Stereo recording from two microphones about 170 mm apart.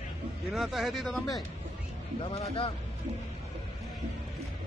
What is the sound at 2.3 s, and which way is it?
Speech, 35° left (ahead or behind).